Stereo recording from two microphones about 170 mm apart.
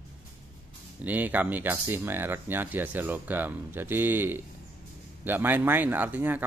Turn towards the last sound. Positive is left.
turn(degrees=-10)  # may be behind; listen again after turning